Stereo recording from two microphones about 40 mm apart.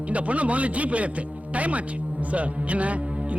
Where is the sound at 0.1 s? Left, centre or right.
Right.